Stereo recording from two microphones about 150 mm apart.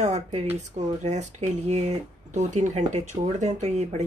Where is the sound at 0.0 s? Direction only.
50° right (ahead or behind).